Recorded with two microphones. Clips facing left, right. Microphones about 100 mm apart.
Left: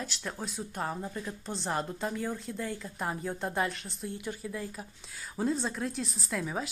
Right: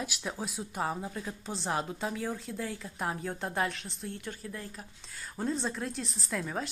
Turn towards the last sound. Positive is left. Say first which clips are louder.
# left 1 dB
turn(degrees=5)  # may be behind; listen again after turning